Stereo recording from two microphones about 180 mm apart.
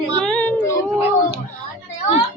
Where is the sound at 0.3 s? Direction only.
10° left (ahead or behind).